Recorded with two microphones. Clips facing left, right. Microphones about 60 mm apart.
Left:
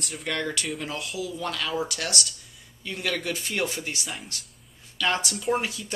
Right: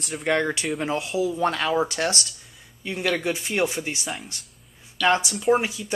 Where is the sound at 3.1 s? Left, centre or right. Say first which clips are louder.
Right 4 dB; centre.